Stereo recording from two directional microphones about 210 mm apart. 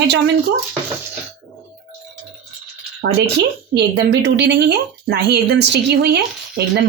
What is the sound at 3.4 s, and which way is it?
A woman's voice, 50° right (ahead or behind).